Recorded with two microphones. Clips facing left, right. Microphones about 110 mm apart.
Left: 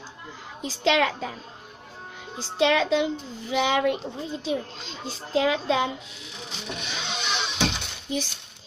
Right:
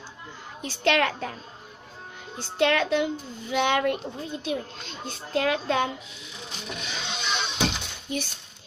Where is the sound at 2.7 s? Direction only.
20° left (ahead or behind).